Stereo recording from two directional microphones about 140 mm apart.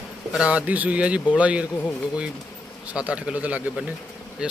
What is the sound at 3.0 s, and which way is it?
Speech, 10° right (ahead or behind).